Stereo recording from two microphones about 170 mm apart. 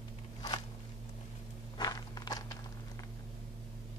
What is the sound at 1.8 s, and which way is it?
Walk, 25° left (ahead or behind).